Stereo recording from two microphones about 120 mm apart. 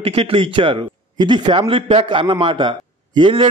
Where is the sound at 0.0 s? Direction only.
50° right (ahead or behind).